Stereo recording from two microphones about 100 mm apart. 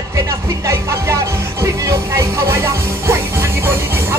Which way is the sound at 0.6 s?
30° right (ahead or behind).